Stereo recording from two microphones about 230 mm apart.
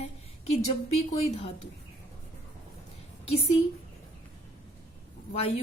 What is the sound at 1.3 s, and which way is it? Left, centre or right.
Speech, left.